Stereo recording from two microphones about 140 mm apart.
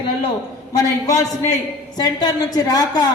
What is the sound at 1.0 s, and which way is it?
A woman's voice, 25° left (ahead or behind).